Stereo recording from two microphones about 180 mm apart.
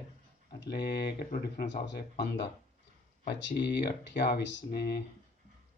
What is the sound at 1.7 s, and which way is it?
Speech, 70° left (ahead or behind).